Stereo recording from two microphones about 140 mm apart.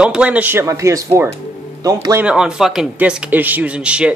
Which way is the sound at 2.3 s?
5° right (ahead or behind).